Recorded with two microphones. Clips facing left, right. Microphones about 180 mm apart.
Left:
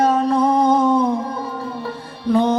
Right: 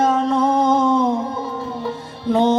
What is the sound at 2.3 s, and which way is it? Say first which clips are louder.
Music: even; 25° right (ahead or behind).